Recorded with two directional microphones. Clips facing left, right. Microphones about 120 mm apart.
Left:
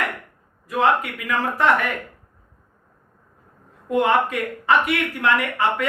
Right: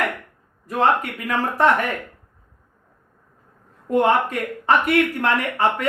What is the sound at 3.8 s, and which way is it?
Speech, 40° right (ahead or behind).